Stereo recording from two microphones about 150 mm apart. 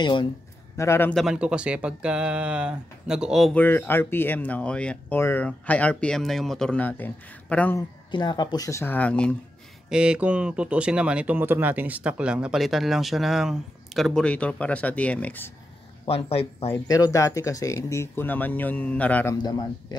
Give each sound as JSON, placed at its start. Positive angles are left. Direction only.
{"t": 0.0, "sound": "speech", "side_deg": 30}
{"t": 0.7, "sound": "speech", "side_deg": 15}
{"t": 1.1, "sound": "speech", "side_deg": -5}
{"t": 3.5, "sound": "speech", "side_deg": 15}
{"t": 8.1, "sound": "speech", "side_deg": 30}
{"t": 9.8, "sound": "speech", "side_deg": -5}
{"t": 16.1, "sound": "speech", "side_deg": 40}
{"t": 16.8, "sound": "speech", "side_deg": 25}
{"t": 19.3, "sound": "speech", "side_deg": 30}